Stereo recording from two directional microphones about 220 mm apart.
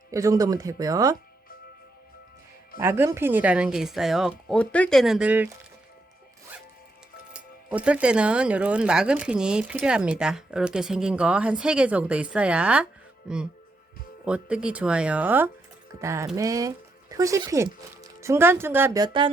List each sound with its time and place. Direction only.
0.1 s speech: 15° right (ahead or behind)
2.7 s speech: 10° right (ahead or behind)
7.3 s speech: 5° right (ahead or behind); by 19.3 s 20° right (ahead or behind)